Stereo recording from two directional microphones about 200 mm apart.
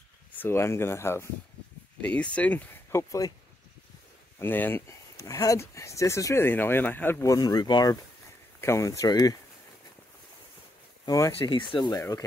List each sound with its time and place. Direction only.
0.3 s speech: 10° left (ahead or behind)
4.4 s speech: 10° left (ahead or behind)
11.1 s speech: 15° left (ahead or behind)